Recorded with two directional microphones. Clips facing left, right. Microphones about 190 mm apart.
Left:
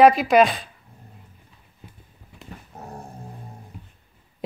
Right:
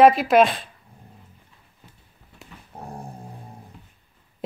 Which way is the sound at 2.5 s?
40° left (ahead or behind).